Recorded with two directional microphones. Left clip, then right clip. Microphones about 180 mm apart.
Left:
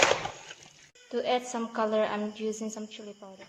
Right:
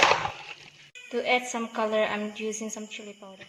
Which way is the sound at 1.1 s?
Centre (ahead or behind).